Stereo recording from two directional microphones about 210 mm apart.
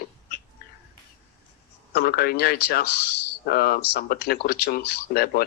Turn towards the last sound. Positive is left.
turn(degrees=45)  # may be behind; listen again after turning